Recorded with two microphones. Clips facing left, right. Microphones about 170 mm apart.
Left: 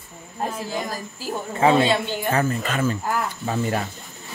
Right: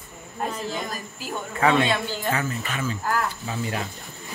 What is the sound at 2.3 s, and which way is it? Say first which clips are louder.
Speech: left 6 dB; 40° left (ahead or behind).